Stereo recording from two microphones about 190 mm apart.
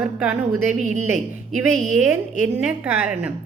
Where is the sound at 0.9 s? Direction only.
40° right (ahead or behind).